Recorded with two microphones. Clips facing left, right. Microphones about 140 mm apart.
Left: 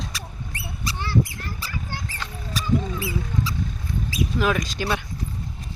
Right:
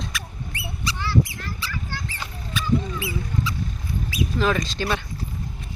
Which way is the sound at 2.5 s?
40° left (ahead or behind).